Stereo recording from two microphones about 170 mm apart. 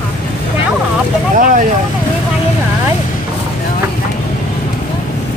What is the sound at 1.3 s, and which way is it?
Speech, 50° right (ahead or behind).